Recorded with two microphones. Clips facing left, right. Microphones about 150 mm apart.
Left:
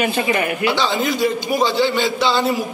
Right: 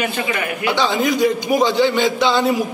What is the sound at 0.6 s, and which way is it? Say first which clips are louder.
A man's voice: right 4 dB; 15° right (ahead or behind).